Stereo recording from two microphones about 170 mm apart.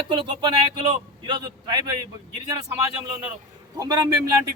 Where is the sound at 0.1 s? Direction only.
30° right (ahead or behind).